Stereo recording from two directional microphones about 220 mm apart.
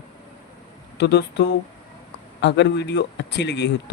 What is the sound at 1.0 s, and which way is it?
Speech, 50° left (ahead or behind).